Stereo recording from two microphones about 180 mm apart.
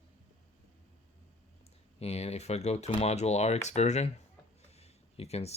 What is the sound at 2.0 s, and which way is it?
Speech, 35° left (ahead or behind).